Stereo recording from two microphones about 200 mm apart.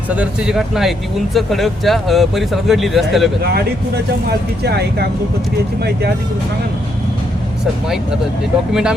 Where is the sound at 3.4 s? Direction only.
55° right (ahead or behind).